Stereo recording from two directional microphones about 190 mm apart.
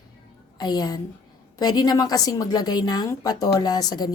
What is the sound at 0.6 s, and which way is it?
A woman's voice, 20° left (ahead or behind).